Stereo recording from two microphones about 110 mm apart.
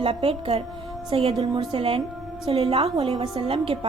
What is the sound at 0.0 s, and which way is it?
A woman's voice, 60° right (ahead or behind).